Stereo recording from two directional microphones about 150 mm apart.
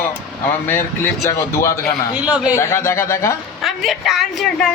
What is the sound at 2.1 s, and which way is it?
Speech, 10° right (ahead or behind).